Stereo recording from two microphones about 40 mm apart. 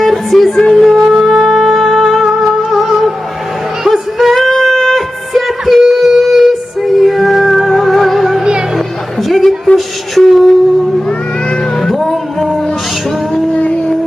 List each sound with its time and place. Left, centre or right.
0.0 s music: centre
1.0 s music: centre
1.3 s music: centre
2.2 s music: centre
4.5 s music: centre
9.3 s a sound: centre
11.8 s music: centre
13.5 s a sound: left